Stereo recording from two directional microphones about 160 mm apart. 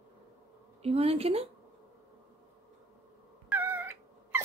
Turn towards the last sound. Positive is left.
turn(degrees=-10)  # may be behind; listen again after turning